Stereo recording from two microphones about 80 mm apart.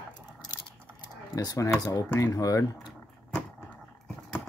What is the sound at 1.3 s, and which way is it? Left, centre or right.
Speech, left.